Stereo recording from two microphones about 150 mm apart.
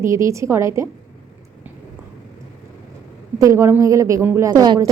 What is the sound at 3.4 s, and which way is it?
A woman's voice, 20° right (ahead or behind).